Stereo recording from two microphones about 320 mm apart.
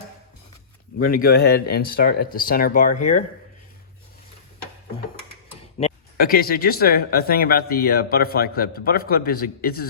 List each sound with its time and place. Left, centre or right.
0.9 s speech: left
5.8 s speech: left